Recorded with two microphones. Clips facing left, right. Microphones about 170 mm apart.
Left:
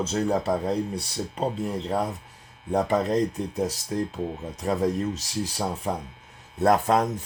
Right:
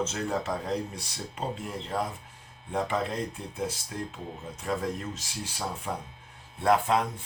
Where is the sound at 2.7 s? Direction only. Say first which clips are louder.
Left 7 dB; 40° left (ahead or behind).